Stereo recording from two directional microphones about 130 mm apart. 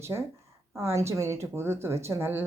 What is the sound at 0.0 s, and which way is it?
A woman's voice, 20° right (ahead or behind).